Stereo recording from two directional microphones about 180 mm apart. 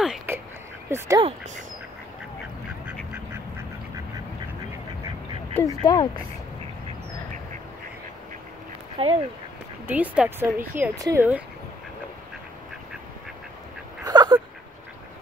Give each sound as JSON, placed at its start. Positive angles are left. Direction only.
{"t": 0.0, "sound": "a sound", "side_deg": -5}
{"t": 0.8, "sound": "speech", "side_deg": -15}
{"t": 5.6, "sound": "speech", "side_deg": 20}
{"t": 9.0, "sound": "speech", "side_deg": -35}
{"t": 9.8, "sound": "speech", "side_deg": -10}
{"t": 14.0, "sound": "a sound", "side_deg": -20}